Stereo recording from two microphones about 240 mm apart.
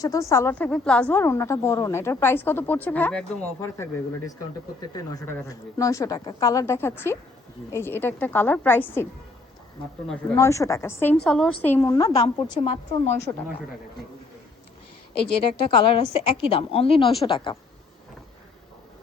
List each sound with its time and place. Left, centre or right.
0.0 s a woman's voice: centre
10.3 s a woman's voice: centre
12.1 s a woman's voice: left
15.4 s a woman's voice: left